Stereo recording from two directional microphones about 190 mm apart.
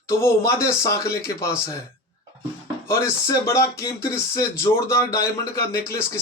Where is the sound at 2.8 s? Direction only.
15° left (ahead or behind).